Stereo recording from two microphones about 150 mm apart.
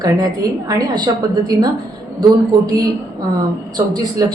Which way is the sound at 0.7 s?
25° right (ahead or behind).